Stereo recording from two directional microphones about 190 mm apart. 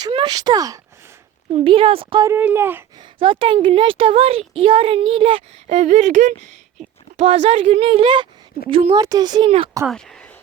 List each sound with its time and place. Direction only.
0.0 s a woman's voice: 25° right (ahead or behind)
2.3 s speech: 10° right (ahead or behind)
3.0 s a woman's voice: 25° right (ahead or behind)
9.0 s a woman's voice: 20° right (ahead or behind)
9.8 s speech: 5° left (ahead or behind)